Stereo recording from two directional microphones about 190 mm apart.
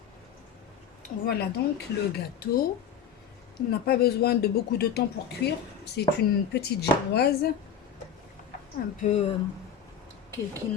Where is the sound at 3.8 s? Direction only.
55° left (ahead or behind).